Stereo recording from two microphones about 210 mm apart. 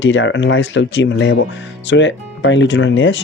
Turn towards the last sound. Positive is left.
turn(degrees=65)  # may be behind; listen again after turning